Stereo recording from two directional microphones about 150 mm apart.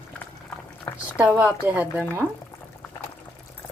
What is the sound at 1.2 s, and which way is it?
A woman's voice, 10° right (ahead or behind).